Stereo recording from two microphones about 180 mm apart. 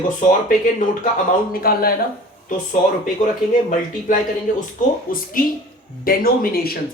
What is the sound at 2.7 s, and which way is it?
Speech, 45° left (ahead or behind).